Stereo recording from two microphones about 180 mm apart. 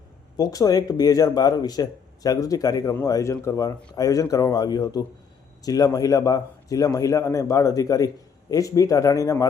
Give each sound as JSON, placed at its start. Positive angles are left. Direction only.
{"t": 0.3, "sound": "speech", "side_deg": 20}